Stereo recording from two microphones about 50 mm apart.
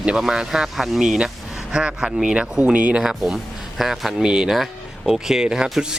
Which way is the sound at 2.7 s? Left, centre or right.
Right.